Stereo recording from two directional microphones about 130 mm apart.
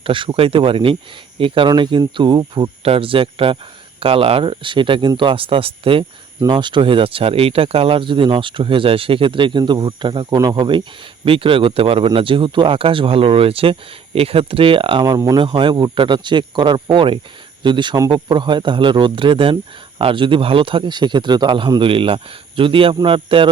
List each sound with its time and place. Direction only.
0.0 s speech: 40° right (ahead or behind)
15.0 s speech: 30° right (ahead or behind)